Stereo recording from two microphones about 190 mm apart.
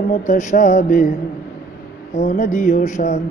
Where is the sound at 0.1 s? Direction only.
40° left (ahead or behind).